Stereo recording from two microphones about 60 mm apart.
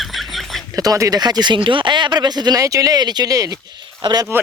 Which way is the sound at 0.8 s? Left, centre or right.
Right.